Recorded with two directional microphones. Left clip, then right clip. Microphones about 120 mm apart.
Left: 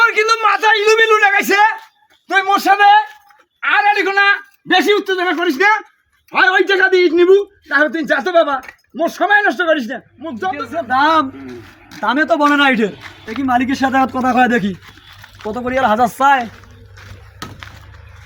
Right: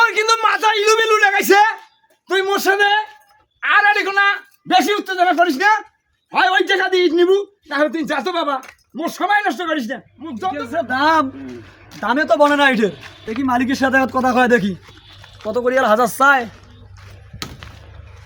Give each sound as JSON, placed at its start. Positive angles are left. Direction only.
{"t": 0.0, "sound": "a sound", "side_deg": -15}
{"t": 6.3, "sound": "a man's voice", "side_deg": -20}
{"t": 11.4, "sound": "speech", "side_deg": 30}
{"t": 12.0, "sound": "speech", "side_deg": -15}